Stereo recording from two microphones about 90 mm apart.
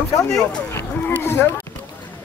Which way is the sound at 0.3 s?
5° left (ahead or behind).